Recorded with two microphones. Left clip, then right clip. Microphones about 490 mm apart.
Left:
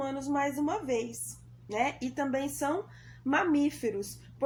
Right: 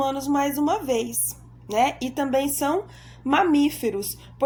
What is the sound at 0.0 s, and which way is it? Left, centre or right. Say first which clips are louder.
A woman's voice: right 8 dB; right.